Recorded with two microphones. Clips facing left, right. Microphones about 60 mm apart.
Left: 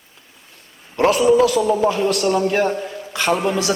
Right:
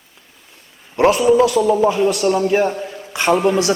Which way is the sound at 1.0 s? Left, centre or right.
Right.